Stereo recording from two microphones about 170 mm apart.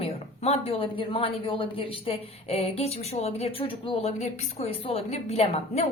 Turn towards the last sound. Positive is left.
turn(degrees=40)  # may be behind; listen again after turning